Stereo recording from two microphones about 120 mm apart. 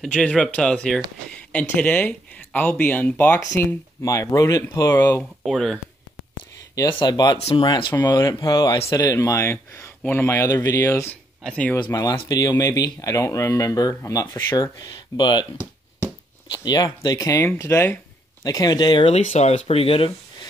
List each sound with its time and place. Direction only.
0.0 s speech: 5° left (ahead or behind); by 4.9 s 30° left (ahead or behind)
4.9 s speech: 15° left (ahead or behind)
7.0 s speech: 35° left (ahead or behind)
7.3 s speech: 55° left (ahead or behind)
7.6 s speech: 40° left (ahead or behind); by 11.1 s 20° left (ahead or behind)
11.4 s speech: 10° left (ahead or behind)
11.9 s speech: 30° left (ahead or behind)
14.2 s speech: 20° left (ahead or behind)
14.6 s speech: 35° left (ahead or behind)
16.5 s speech: 35° left (ahead or behind)
18.4 s speech: 30° left (ahead or behind)
19.1 s speech: 70° left (ahead or behind); by 20.1 s 55° left (ahead or behind)